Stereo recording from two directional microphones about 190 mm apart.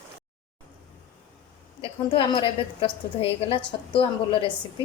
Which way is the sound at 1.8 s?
25° left (ahead or behind).